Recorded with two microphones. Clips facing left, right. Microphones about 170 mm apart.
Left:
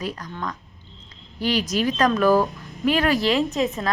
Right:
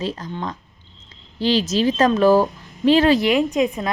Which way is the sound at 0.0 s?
25° right (ahead or behind).